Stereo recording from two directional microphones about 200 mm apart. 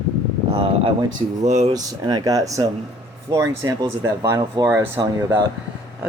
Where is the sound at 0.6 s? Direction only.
25° right (ahead or behind).